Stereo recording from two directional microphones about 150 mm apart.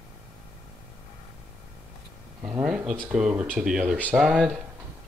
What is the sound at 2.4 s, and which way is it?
Speech, 5° right (ahead or behind).